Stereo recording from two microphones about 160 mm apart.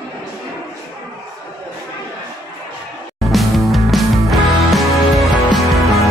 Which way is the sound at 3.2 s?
Centre (ahead or behind).